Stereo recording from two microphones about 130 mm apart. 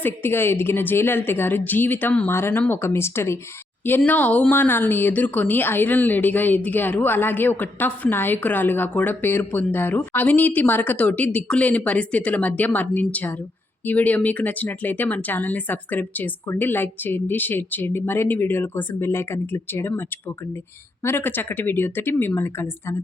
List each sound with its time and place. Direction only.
0.0 s a woman's voice: 15° left (ahead or behind)